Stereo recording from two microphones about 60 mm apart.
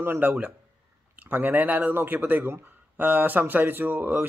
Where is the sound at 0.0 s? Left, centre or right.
Right.